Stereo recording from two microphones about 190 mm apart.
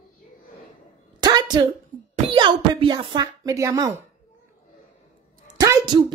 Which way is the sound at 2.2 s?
25° right (ahead or behind).